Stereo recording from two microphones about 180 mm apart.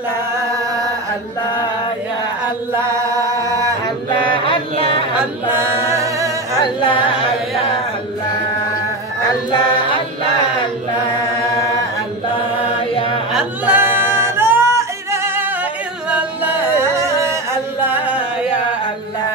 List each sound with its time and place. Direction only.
0.5 s a sound: 20° right (ahead or behind)
2.8 s music: 15° right (ahead or behind)
4.3 s music: 30° left (ahead or behind)
5.2 s a capella: 15° right (ahead or behind)
6.6 s carnatic music: 25° left (ahead or behind)
9.5 s a sound: 25° left (ahead or behind)
13.3 s singing: 5° right (ahead or behind)
16.1 s music: 10° right (ahead or behind)
17.8 s singing: 10° right (ahead or behind)